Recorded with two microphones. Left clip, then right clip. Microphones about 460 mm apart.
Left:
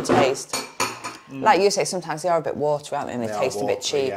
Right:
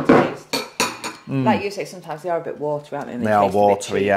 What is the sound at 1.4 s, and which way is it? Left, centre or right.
A woman's voice, left.